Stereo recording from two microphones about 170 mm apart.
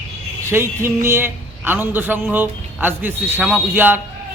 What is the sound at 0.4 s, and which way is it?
A man's voice, 15° right (ahead or behind).